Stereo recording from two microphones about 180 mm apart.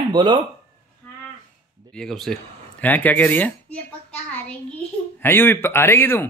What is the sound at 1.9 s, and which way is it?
A child's voice, 5° left (ahead or behind).